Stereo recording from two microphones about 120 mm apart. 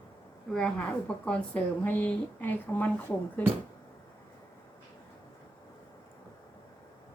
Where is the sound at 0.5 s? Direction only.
10° left (ahead or behind).